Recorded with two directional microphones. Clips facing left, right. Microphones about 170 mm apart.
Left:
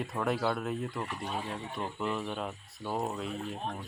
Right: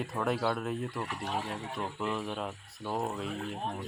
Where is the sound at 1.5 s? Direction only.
Centre (ahead or behind).